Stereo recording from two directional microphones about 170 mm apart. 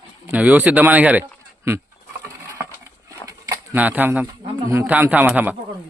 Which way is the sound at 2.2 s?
15° right (ahead or behind).